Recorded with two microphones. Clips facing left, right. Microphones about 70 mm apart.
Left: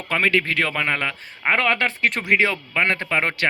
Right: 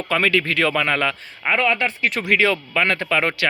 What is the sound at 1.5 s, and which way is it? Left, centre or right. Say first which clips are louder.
Speech: even; left.